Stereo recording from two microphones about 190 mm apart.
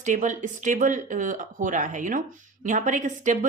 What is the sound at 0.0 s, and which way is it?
Speech, 40° right (ahead or behind).